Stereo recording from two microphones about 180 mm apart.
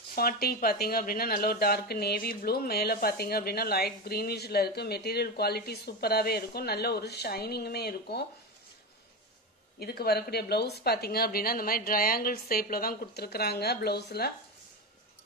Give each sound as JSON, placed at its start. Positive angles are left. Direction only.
{"t": 0.1, "sound": "speech", "side_deg": 55}
{"t": 9.8, "sound": "speech", "side_deg": 60}